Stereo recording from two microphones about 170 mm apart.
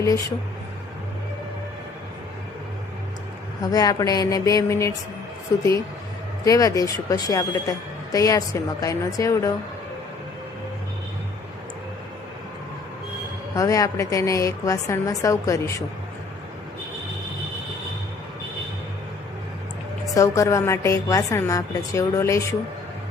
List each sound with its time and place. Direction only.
0.0 s a woman's voice: 20° left (ahead or behind)
3.6 s a woman's voice: 25° left (ahead or behind)
6.4 s a woman's voice: 20° left (ahead or behind)
13.6 s a woman's voice: 20° left (ahead or behind)
20.1 s a woman's voice: 20° left (ahead or behind)